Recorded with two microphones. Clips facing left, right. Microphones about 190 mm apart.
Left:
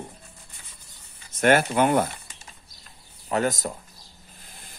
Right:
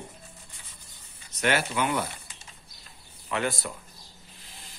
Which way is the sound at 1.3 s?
50° left (ahead or behind).